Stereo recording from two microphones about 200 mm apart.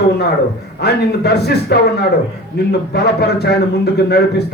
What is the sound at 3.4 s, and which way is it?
A man's voice, 55° left (ahead or behind).